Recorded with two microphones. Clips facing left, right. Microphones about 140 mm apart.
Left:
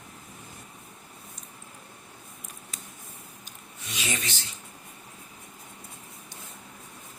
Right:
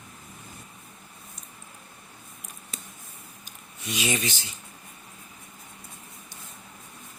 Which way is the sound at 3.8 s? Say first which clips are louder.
Right 6 dB; 10° right (ahead or behind).